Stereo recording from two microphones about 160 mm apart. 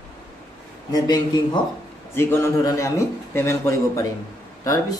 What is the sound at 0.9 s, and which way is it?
A man's voice, 25° left (ahead or behind).